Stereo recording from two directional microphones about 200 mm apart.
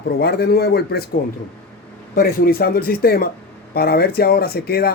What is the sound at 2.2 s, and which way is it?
Speech, 50° left (ahead or behind).